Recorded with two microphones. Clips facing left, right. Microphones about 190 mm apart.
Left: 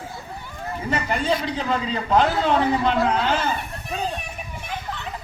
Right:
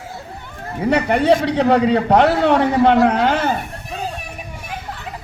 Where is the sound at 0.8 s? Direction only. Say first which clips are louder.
Right 9 dB; 65° right (ahead or behind).